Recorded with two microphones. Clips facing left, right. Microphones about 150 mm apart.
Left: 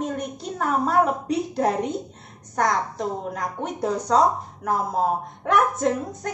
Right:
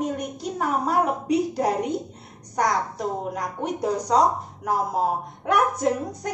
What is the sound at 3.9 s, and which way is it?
Speech, 15° right (ahead or behind).